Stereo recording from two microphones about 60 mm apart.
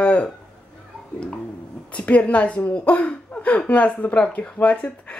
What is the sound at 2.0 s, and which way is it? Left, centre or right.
Speech, left.